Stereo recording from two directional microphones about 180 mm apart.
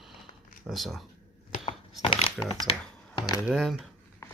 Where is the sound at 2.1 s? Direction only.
30° left (ahead or behind).